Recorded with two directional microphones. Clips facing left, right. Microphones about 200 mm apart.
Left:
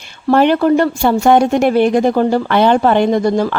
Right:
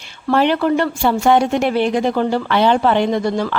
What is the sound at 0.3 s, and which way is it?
A woman's voice, 45° left (ahead or behind).